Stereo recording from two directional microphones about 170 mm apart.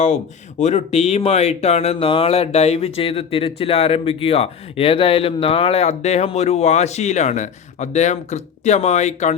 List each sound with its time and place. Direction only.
0.6 s speech: 45° left (ahead or behind)